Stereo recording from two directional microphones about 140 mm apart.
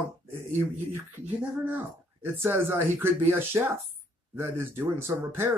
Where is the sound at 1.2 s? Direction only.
55° right (ahead or behind).